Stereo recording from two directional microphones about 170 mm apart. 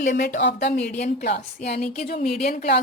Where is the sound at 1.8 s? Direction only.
55° left (ahead or behind).